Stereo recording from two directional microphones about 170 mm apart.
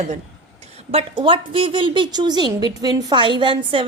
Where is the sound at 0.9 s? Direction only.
35° right (ahead or behind).